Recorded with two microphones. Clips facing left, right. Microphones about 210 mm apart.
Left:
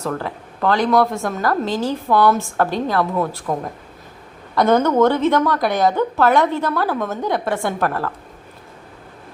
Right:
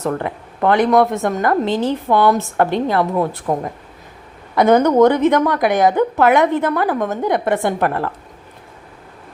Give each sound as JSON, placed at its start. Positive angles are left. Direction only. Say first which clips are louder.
{"t": 0.9, "sound": "a woman's voice", "louder": "right 3 dB", "side_deg": -20}